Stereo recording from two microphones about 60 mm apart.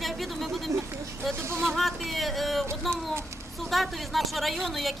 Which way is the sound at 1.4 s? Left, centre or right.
Right.